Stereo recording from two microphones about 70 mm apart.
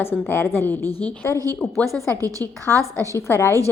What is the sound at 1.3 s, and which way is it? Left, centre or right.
A woman's voice, right.